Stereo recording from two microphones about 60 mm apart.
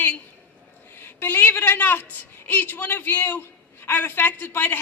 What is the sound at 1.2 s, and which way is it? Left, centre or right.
A woman's voice, left.